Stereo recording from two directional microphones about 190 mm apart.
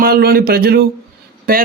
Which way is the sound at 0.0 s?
55° right (ahead or behind).